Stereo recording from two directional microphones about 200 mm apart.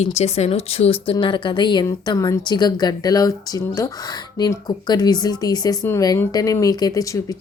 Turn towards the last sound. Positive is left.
turn(degrees=15)  # may be behind; listen again after turning